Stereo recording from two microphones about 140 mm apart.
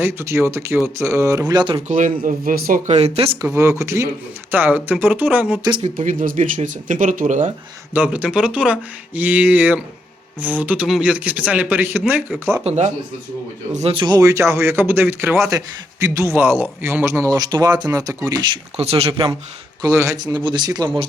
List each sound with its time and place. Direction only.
0.0 s speech: 20° right (ahead or behind)
1.9 s speech: 70° right (ahead or behind); by 3.3 s 45° right (ahead or behind)
3.4 s speech: 20° right (ahead or behind)
5.8 s speech: 65° right (ahead or behind)
7.9 s speech: 10° right (ahead or behind)
12.6 s speech: 55° right (ahead or behind)
13.7 s speech: 40° right (ahead or behind)
18.8 s speech: 45° right (ahead or behind)
19.8 s speech: 20° right (ahead or behind)